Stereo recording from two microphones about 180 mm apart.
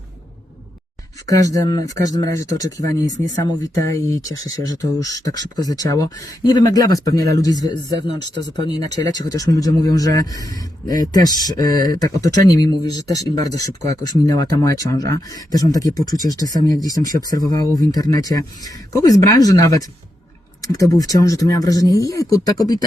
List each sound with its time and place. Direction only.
1.3 s speech: 20° left (ahead or behind)